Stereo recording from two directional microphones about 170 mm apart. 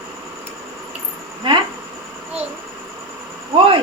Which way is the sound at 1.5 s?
30° right (ahead or behind).